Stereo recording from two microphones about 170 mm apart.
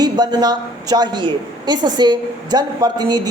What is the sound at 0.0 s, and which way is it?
A man's voice, 25° right (ahead or behind).